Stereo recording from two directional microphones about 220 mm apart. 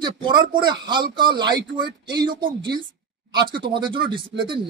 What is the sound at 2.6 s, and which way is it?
Speech, 20° right (ahead or behind).